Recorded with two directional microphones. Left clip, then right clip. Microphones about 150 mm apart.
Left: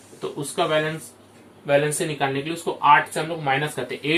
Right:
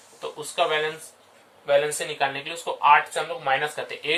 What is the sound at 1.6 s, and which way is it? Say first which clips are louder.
Speech: left 1 dB; 35° right (ahead or behind).